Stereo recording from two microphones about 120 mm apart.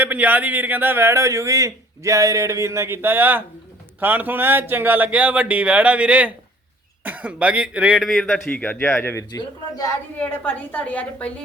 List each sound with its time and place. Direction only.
0.0 s speech: 15° right (ahead or behind)
8.0 s a man's voice: centre (ahead or behind)
8.4 s a woman's voice: 15° left (ahead or behind)
9.3 s a man's voice: 30° left (ahead or behind)
10.2 s a woman's voice: 15° left (ahead or behind)